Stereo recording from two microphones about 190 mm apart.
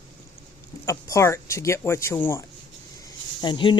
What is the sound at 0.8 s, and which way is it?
Speech, 15° left (ahead or behind).